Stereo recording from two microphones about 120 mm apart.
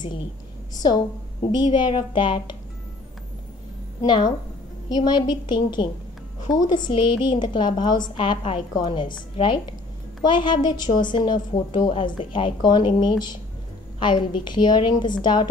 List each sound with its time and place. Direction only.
1.5 s a woman's voice: 40° left (ahead or behind)
4.0 s a woman's voice: 35° left (ahead or behind)